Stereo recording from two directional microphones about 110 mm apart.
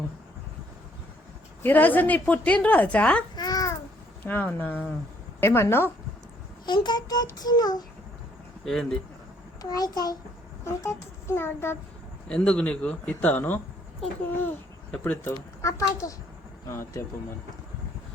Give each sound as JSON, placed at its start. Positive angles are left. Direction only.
{"t": 1.6, "sound": "speech", "side_deg": 15}
{"t": 3.3, "sound": "babbling", "side_deg": 35}
{"t": 4.3, "sound": "speech", "side_deg": 15}
{"t": 6.7, "sound": "speech", "side_deg": 45}
{"t": 8.6, "sound": "speech", "side_deg": 5}
{"t": 9.6, "sound": "speech", "side_deg": 35}
{"t": 10.6, "sound": "a child's voice", "side_deg": 25}
{"t": 12.3, "sound": "speech", "side_deg": 10}
{"t": 14.9, "sound": "speech", "side_deg": 15}
{"t": 15.6, "sound": "speech", "side_deg": 30}